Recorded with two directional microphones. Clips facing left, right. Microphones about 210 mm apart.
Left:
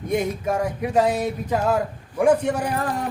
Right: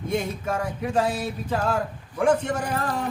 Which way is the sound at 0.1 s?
15° left (ahead or behind).